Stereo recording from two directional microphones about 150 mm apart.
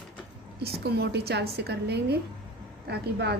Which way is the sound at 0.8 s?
90° right.